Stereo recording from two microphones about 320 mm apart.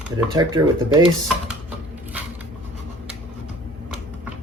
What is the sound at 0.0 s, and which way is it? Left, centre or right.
A man's voice, centre.